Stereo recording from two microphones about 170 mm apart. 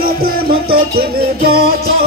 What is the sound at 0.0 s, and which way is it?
Music, 60° right (ahead or behind).